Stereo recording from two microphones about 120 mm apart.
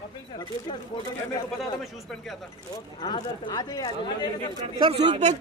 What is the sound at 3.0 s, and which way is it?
Speech, 40° left (ahead or behind).